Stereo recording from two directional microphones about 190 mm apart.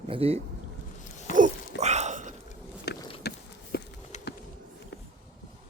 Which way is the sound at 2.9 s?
60° left (ahead or behind).